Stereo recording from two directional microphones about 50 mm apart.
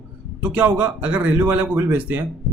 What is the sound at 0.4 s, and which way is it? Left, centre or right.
Speech, right.